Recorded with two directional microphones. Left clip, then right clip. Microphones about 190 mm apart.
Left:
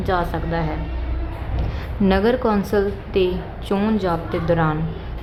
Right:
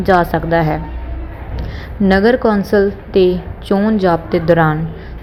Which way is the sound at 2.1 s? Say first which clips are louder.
Right 6 dB; 20° right (ahead or behind).